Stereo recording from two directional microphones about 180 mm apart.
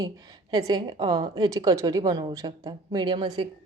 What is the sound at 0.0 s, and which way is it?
A woman's voice, 20° right (ahead or behind).